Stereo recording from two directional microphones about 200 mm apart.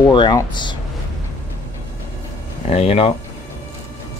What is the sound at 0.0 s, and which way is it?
Speech, 20° left (ahead or behind).